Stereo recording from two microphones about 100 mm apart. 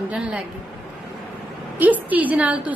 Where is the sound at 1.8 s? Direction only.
15° right (ahead or behind).